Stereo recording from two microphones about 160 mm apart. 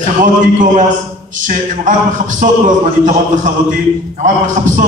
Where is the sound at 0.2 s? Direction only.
55° right (ahead or behind).